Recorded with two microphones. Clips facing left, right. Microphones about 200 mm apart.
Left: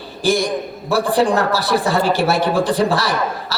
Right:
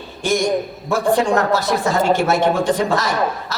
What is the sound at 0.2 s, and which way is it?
A man's voice, 35° left (ahead or behind).